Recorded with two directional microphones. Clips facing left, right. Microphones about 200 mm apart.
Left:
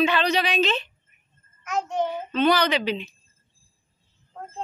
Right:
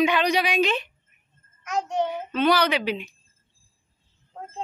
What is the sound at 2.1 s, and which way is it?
Child singing, 15° right (ahead or behind).